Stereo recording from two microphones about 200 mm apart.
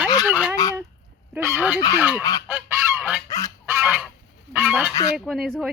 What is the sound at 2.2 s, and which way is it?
Goose, 20° left (ahead or behind).